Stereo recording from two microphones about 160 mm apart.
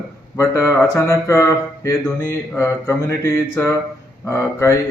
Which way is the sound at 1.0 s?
20° left (ahead or behind).